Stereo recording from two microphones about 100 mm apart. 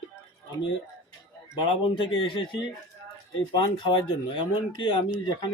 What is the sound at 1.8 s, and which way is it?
Speech, 60° left (ahead or behind).